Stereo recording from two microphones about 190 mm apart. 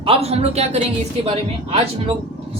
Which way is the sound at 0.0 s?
30° right (ahead or behind).